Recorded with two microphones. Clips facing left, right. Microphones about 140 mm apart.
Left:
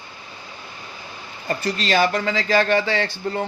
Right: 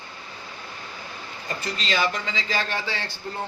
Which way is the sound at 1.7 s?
50° left (ahead or behind).